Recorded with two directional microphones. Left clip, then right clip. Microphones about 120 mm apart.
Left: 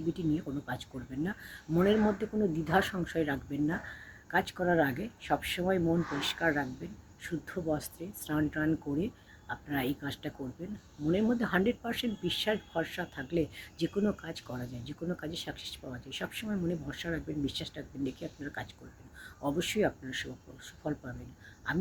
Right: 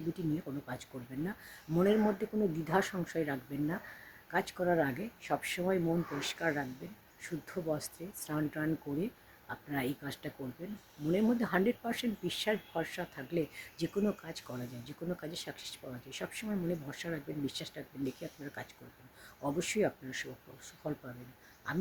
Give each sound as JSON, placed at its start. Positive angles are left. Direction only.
{"t": 0.7, "sound": "speech", "side_deg": -15}